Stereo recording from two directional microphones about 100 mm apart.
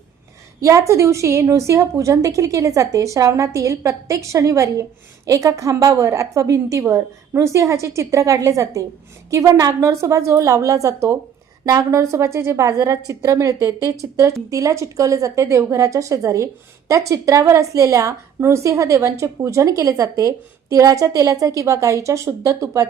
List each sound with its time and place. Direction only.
0.6 s a woman's voice: 30° right (ahead or behind)